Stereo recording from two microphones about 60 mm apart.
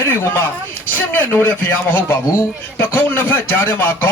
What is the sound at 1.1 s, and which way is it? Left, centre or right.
Speech, left.